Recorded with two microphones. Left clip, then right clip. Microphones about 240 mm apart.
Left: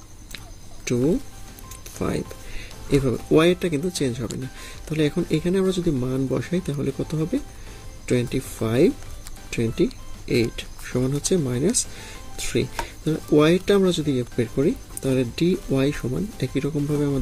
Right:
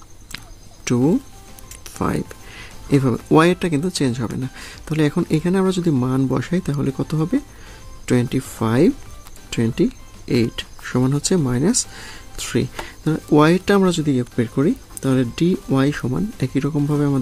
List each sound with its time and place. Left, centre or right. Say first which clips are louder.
2.0 s speech: right 4 dB; right
10.2 s speech: right 2 dB; right